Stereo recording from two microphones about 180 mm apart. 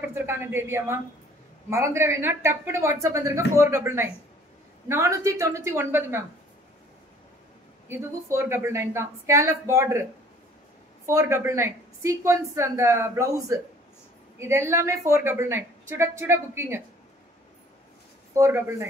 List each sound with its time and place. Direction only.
0.1 s a woman's voice: 15° right (ahead or behind)
7.9 s a woman's voice: 15° right (ahead or behind)
11.1 s a woman's voice: 15° right (ahead or behind)
18.3 s a woman's voice: 15° right (ahead or behind)